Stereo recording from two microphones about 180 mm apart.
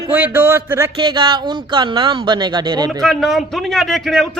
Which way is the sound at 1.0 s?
25° right (ahead or behind).